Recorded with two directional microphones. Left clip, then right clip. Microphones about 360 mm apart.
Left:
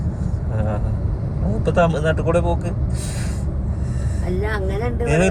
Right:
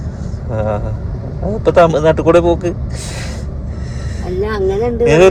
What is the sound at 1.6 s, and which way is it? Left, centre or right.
Speech, right.